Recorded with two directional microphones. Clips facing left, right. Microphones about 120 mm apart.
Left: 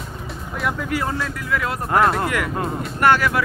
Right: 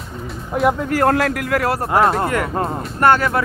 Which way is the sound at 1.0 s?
70° right (ahead or behind).